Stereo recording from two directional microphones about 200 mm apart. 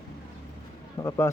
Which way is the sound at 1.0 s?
15° left (ahead or behind).